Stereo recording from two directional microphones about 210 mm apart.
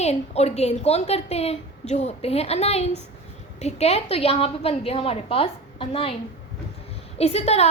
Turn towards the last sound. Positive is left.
turn(degrees=30)  # may be behind; listen again after turning